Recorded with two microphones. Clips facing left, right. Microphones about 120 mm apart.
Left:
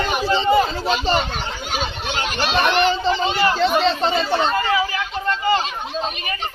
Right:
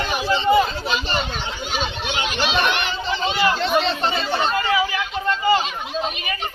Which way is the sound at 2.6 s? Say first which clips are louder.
Left 9 dB; 35° left (ahead or behind).